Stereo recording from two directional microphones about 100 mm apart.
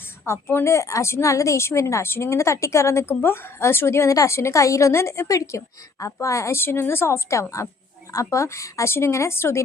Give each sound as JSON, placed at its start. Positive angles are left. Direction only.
{"t": 0.3, "sound": "speech", "side_deg": 25}